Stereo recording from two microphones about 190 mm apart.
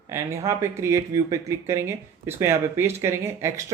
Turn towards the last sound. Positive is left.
turn(degrees=-15)  # may be behind; listen again after turning